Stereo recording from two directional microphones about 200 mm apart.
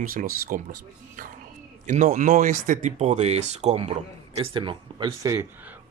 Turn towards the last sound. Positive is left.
turn(degrees=-15)  # may be behind; listen again after turning